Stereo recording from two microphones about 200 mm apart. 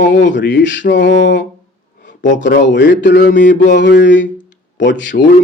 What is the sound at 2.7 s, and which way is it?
Speech, 60° left (ahead or behind).